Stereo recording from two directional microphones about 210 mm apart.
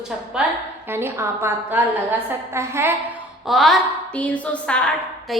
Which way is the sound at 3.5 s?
Centre (ahead or behind).